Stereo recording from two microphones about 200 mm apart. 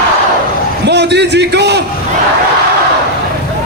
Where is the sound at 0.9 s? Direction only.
60° right (ahead or behind).